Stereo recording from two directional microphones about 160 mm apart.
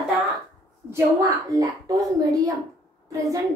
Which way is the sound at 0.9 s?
20° right (ahead or behind).